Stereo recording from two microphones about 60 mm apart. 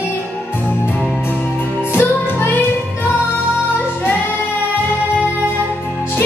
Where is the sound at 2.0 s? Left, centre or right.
Left.